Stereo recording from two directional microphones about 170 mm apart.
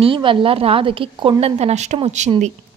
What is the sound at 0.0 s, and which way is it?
A woman's voice, 30° right (ahead or behind).